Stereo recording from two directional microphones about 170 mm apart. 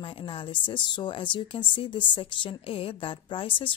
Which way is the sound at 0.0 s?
30° left (ahead or behind).